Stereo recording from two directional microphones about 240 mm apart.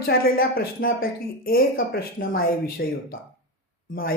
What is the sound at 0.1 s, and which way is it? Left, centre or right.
Speech, left.